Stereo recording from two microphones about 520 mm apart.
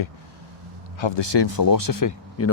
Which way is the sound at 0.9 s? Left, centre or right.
Left.